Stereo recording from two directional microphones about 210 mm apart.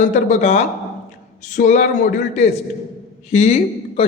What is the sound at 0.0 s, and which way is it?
A man's voice, 35° left (ahead or behind).